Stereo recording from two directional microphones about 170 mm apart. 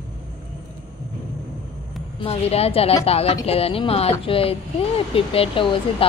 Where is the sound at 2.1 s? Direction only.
35° left (ahead or behind).